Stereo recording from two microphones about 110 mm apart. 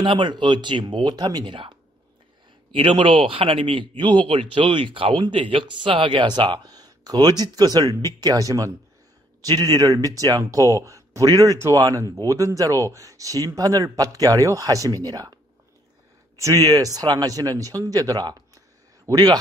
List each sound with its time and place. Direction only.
0.0 s speech: 45° right (ahead or behind)
16.6 s speech: 35° right (ahead or behind)